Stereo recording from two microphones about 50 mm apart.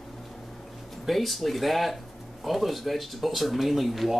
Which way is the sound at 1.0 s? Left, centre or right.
Centre.